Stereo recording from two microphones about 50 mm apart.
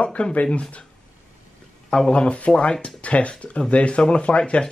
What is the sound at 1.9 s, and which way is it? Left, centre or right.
Speech, centre.